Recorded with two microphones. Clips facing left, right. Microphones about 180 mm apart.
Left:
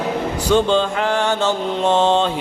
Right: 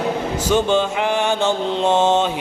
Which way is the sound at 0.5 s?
10° right (ahead or behind).